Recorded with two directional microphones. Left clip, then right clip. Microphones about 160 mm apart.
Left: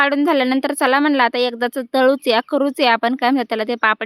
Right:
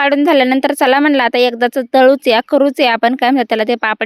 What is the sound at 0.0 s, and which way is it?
A woman's voice, 25° right (ahead or behind).